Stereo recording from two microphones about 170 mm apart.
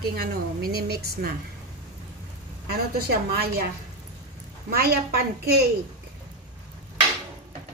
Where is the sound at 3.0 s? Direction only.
65° right (ahead or behind).